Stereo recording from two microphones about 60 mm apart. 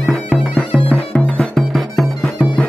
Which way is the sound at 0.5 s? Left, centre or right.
Centre.